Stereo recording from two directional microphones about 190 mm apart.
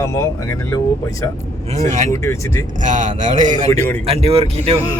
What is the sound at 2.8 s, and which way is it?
Speech, 40° right (ahead or behind).